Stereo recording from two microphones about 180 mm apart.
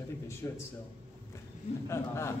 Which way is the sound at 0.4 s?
15° left (ahead or behind).